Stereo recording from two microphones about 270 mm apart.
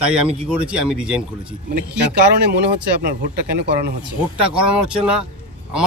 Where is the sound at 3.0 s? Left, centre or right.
Right.